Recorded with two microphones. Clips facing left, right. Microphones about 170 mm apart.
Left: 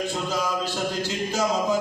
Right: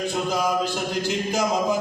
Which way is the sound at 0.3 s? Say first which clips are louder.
Right 3 dB; 15° right (ahead or behind).